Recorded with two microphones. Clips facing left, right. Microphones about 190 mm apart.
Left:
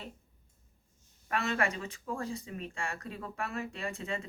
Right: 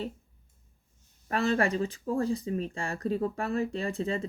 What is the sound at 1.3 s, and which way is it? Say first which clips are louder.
Speech: right 6 dB; 35° right (ahead or behind).